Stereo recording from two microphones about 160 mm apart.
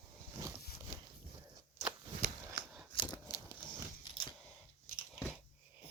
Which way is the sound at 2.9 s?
30° left (ahead or behind).